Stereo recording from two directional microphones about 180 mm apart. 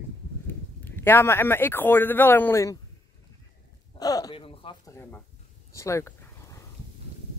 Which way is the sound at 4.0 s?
20° left (ahead or behind).